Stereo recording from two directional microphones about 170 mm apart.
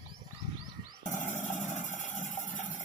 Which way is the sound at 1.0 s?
45° left (ahead or behind).